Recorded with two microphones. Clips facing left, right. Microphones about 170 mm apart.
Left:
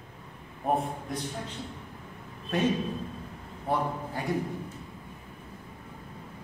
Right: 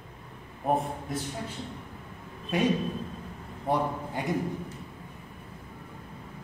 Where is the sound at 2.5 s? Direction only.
10° right (ahead or behind).